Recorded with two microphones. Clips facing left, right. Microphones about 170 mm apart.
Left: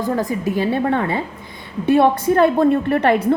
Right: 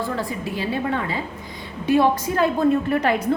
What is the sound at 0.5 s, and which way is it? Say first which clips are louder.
A woman's voice: left 5 dB; 55° left (ahead or behind).